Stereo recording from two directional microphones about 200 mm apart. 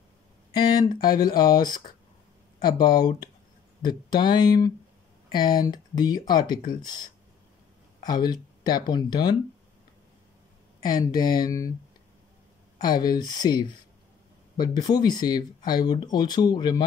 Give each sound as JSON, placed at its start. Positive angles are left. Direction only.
{"t": 0.5, "sound": "a sound", "side_deg": 20}
{"t": 1.2, "sound": "speech", "side_deg": 20}
{"t": 10.8, "sound": "speech", "side_deg": 20}
{"t": 12.7, "sound": "speech", "side_deg": 20}